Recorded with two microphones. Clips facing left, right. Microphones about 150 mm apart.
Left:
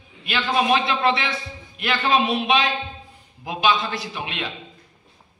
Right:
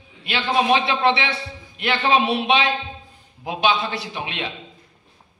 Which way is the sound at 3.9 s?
30° right (ahead or behind).